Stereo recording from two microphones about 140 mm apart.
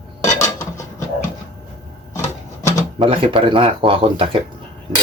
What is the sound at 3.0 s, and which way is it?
Speech, 40° right (ahead or behind).